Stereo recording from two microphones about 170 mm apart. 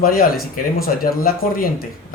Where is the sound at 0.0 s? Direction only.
60° left (ahead or behind).